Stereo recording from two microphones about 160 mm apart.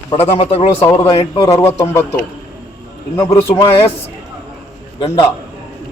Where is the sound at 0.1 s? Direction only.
40° left (ahead or behind).